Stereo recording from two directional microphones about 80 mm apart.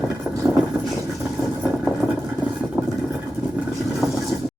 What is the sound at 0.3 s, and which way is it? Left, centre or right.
Vehicle, centre.